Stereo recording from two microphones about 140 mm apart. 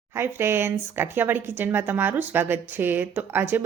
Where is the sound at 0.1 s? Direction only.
15° right (ahead or behind).